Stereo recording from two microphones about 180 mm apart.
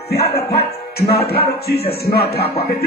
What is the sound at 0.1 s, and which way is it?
Speech, 60° left (ahead or behind).